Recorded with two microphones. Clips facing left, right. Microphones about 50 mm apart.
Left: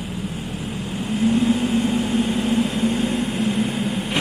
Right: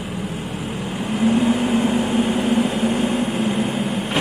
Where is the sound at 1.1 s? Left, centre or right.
Right.